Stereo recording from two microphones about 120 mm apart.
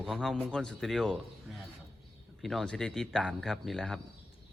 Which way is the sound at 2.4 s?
Centre (ahead or behind).